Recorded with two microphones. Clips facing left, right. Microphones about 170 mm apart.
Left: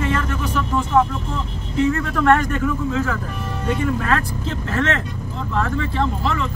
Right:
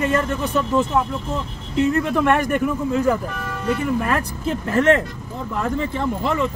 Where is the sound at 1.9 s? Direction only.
15° right (ahead or behind).